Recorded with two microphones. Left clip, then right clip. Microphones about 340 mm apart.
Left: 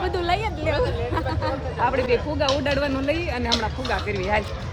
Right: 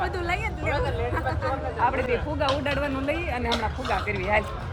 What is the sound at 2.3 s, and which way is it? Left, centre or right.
Speech, centre.